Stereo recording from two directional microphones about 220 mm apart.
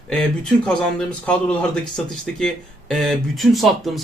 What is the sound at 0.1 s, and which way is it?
Speech, 5° left (ahead or behind).